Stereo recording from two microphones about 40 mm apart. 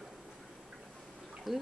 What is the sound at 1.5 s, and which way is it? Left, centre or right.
Speech, centre.